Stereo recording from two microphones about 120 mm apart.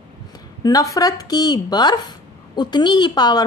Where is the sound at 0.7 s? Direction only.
30° left (ahead or behind).